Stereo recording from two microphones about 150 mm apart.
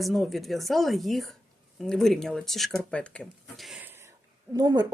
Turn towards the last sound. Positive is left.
turn(degrees=-30)  # may be behind; listen again after turning